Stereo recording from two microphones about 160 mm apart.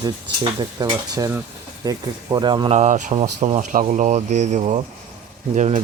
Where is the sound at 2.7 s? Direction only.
50° right (ahead or behind).